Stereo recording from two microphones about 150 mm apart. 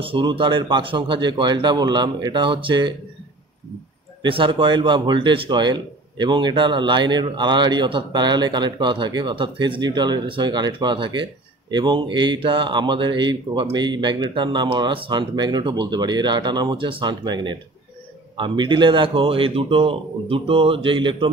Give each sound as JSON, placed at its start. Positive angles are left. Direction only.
{"t": 0.0, "sound": "speech", "side_deg": -35}
{"t": 4.2, "sound": "speech", "side_deg": -35}